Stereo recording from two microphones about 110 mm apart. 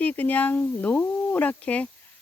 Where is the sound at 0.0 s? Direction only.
15° left (ahead or behind).